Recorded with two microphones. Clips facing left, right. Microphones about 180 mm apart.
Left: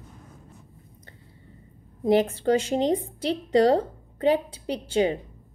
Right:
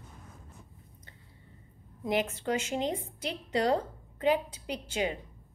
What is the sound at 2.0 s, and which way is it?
A woman's voice, 30° left (ahead or behind).